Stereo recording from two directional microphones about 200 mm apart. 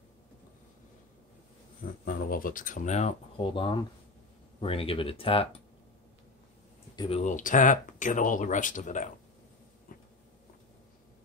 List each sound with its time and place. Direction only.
2.0 s speech: 45° left (ahead or behind); by 5.5 s 25° left (ahead or behind)
7.0 s speech: 30° left (ahead or behind)
9.9 s a sound: 45° left (ahead or behind)